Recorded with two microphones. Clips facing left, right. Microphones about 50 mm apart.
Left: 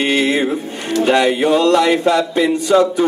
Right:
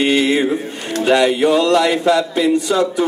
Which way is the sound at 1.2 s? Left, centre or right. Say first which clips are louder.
Right 1 dB; left.